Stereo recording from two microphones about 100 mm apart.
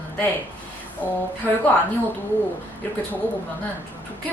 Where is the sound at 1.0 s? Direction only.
20° left (ahead or behind).